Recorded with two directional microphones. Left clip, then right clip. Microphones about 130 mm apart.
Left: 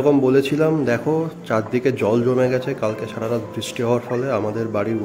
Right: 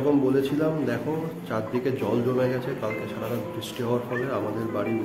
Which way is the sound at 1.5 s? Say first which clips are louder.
Left 7 dB; 65° left (ahead or behind).